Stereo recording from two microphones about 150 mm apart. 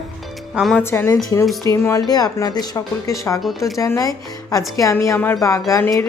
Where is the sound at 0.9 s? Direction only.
15° left (ahead or behind).